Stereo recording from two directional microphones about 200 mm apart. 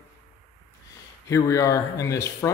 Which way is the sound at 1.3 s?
15° left (ahead or behind).